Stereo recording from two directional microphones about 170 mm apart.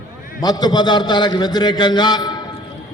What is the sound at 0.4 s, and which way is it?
A man's voice, 25° left (ahead or behind).